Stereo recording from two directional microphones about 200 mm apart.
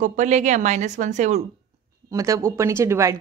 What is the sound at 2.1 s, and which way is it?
Speech, 15° right (ahead or behind).